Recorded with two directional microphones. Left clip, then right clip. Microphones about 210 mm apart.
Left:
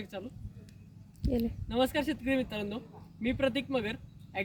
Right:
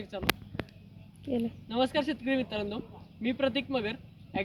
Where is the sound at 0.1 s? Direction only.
20° left (ahead or behind).